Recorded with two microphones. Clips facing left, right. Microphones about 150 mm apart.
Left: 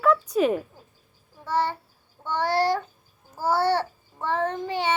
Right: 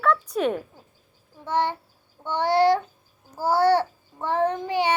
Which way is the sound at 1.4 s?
20° right (ahead or behind).